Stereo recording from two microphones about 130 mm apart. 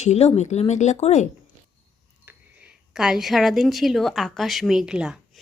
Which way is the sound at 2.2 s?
15° right (ahead or behind).